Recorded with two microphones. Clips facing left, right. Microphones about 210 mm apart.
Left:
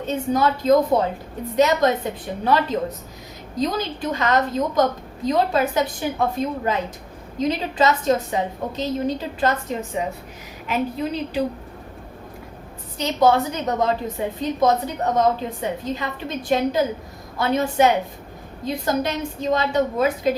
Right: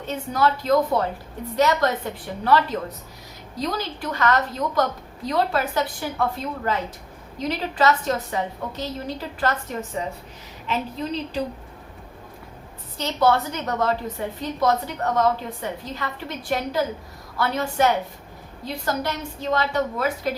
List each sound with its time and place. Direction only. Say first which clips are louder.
0.1 s a woman's voice: left 2 dB; 20° left (ahead or behind)
10.7 s a woman's voice: left 3 dB; 10° left (ahead or behind)
13.0 s a woman's voice: left 3 dB; 15° left (ahead or behind)